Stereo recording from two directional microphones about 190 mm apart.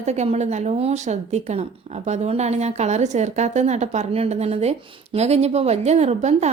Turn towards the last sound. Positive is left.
turn(degrees=-35)  # may be behind; listen again after turning